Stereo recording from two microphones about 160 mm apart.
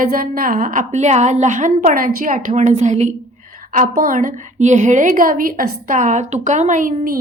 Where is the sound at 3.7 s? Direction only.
60° right (ahead or behind).